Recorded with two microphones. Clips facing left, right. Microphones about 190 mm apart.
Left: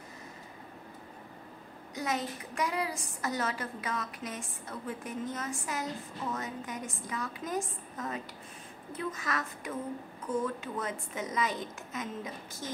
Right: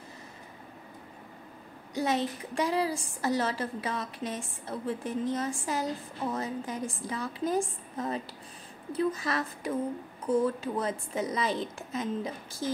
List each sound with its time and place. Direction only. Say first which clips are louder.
2.0 s a woman's voice: right 5 dB; 30° right (ahead or behind)